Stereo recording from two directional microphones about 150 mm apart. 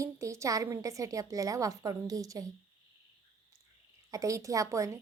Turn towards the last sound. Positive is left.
turn(degrees=-20)  # may be behind; listen again after turning